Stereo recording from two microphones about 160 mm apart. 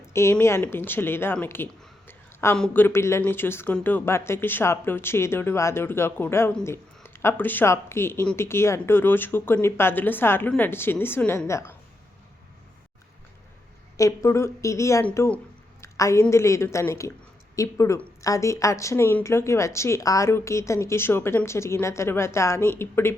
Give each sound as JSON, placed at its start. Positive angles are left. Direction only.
{"t": 0.1, "sound": "a woman's voice", "side_deg": 15}
{"t": 13.9, "sound": "a woman's voice", "side_deg": 20}
{"t": 15.8, "sound": "a sound", "side_deg": 20}
{"t": 16.3, "sound": "a woman's voice", "side_deg": 15}